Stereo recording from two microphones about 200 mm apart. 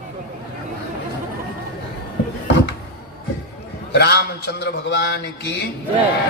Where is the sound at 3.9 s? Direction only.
55° left (ahead or behind).